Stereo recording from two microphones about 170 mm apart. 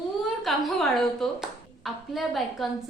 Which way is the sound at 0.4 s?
Centre (ahead or behind).